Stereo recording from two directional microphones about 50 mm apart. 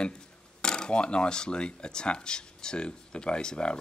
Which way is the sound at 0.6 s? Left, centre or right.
Centre.